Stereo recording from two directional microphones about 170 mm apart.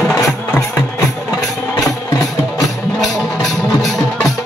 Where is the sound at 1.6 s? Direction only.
15° left (ahead or behind).